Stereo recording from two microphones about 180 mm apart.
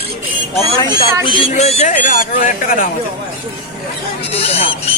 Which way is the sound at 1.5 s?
35° left (ahead or behind).